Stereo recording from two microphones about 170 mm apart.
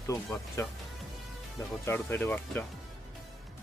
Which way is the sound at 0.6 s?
15° left (ahead or behind).